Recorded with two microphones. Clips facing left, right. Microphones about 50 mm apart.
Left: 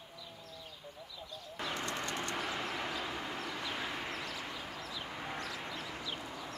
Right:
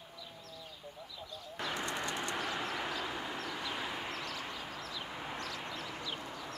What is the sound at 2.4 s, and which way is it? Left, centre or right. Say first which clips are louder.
Vehicle: right 1 dB; centre.